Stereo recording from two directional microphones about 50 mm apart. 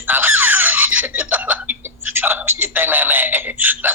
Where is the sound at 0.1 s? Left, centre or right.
Right.